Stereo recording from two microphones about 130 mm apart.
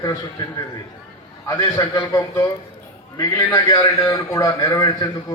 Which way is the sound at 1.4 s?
25° left (ahead or behind).